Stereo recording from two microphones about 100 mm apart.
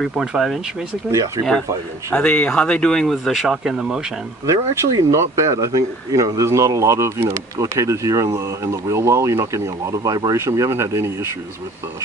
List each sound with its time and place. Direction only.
0.0 s speech: 5° right (ahead or behind)
1.1 s speech: 35° right (ahead or behind)
2.1 s speech: 15° left (ahead or behind); by 4.0 s centre (ahead or behind)
4.5 s speech: 35° right (ahead or behind)